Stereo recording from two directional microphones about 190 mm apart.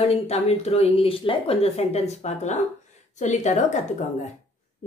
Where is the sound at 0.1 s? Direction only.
35° left (ahead or behind).